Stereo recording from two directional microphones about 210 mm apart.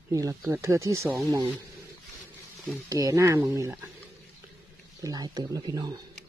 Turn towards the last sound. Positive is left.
turn(degrees=-20)  # may be behind; listen again after turning